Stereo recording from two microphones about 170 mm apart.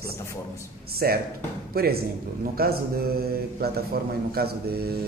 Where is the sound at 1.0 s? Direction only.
65° right (ahead or behind).